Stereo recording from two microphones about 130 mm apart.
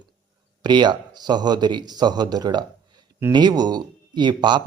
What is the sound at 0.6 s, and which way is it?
A man's voice, 35° right (ahead or behind).